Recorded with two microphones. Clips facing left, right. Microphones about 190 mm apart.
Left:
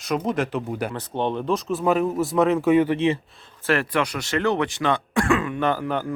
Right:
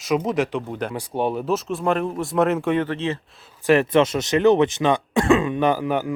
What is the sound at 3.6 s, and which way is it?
Speech, 20° right (ahead or behind).